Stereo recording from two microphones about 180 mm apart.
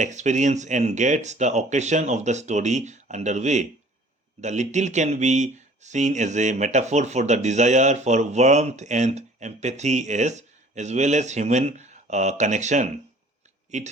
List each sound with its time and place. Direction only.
0.0 s speech: 40° right (ahead or behind)